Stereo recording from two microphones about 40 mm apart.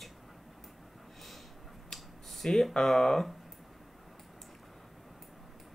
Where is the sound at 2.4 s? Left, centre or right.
Centre.